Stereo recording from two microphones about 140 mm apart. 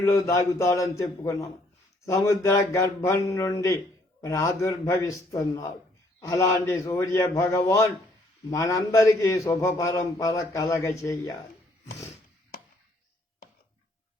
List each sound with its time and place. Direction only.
0.0 s a man's voice: 20° left (ahead or behind)